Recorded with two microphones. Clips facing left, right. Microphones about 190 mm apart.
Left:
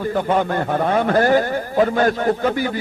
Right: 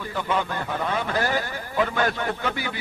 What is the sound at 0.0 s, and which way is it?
A man's voice, 45° left (ahead or behind).